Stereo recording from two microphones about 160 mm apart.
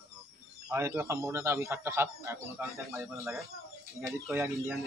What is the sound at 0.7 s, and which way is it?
A man's voice, 15° right (ahead or behind).